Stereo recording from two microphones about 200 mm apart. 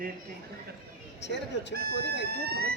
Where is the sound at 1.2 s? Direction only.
60° left (ahead or behind).